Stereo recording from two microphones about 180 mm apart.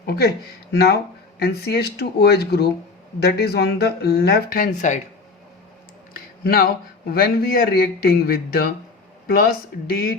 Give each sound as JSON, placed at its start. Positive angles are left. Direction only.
{"t": 0.0, "sound": "speech", "side_deg": 65}
{"t": 6.1, "sound": "a sound", "side_deg": 55}
{"t": 7.1, "sound": "speech", "side_deg": 55}